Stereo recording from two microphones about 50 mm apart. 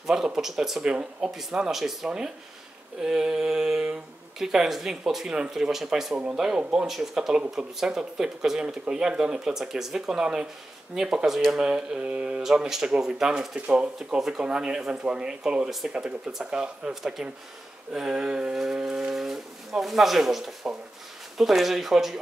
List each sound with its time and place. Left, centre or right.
0.0 s speech: centre
12.4 s speech: centre
13.6 s speech: right
13.9 s speech: centre